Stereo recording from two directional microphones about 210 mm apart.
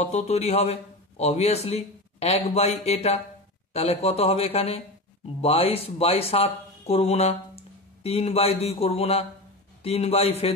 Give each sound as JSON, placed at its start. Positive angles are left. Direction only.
{"t": 0.0, "sound": "a man's voice", "side_deg": 30}